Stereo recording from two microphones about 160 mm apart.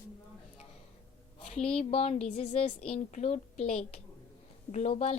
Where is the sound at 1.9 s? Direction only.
40° left (ahead or behind).